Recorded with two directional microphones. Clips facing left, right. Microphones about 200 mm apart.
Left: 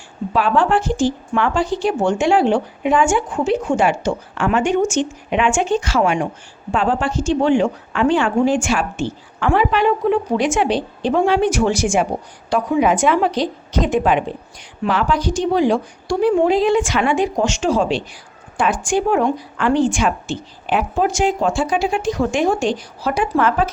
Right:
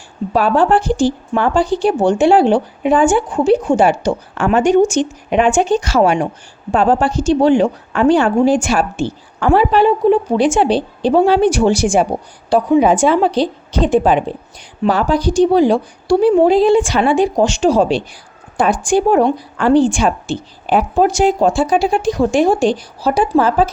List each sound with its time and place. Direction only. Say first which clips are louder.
0.3 s speech: right 4 dB; 40° right (ahead or behind)